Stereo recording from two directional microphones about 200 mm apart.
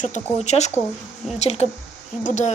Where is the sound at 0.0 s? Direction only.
35° left (ahead or behind).